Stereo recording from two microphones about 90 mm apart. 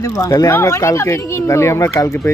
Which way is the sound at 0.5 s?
30° left (ahead or behind).